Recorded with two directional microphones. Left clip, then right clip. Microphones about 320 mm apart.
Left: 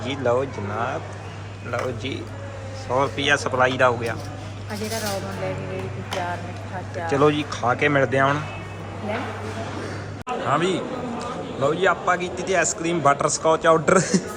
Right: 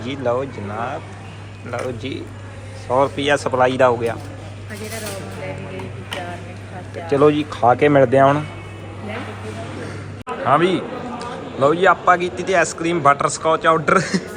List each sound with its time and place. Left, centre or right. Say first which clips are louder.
0.0 s speech: right 1 dB; centre
7.1 s speech: right 5 dB; centre
10.4 s a man's voice: right 7 dB; centre